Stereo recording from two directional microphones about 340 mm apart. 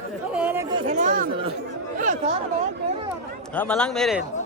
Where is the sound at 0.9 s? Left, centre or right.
Right.